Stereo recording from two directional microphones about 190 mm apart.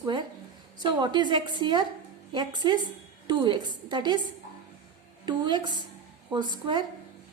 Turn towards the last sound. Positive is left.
turn(degrees=-25)  # may be behind; listen again after turning